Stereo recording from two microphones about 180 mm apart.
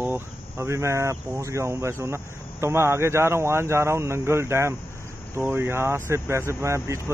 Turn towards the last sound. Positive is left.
turn(degrees=-15)  # may be behind; listen again after turning